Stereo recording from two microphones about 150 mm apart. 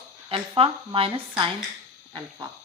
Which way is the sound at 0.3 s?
40° right (ahead or behind).